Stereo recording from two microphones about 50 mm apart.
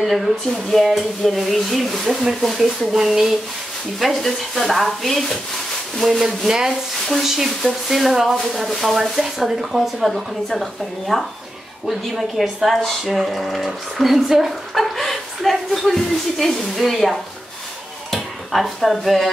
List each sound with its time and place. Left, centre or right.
0.0 s speech: centre
4.1 s speech: centre